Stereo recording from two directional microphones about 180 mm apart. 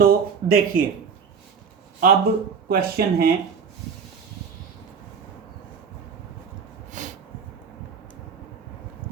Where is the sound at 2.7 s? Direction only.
55° right (ahead or behind).